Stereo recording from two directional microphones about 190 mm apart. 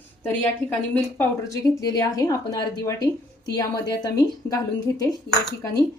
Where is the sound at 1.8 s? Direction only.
20° left (ahead or behind).